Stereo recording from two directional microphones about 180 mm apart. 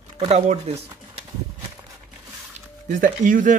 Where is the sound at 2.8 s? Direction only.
45° right (ahead or behind).